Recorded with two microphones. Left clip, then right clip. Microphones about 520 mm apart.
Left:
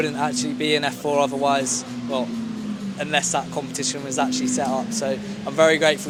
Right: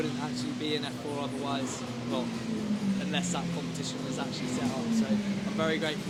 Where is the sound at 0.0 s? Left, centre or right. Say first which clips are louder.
Left 11 dB; left.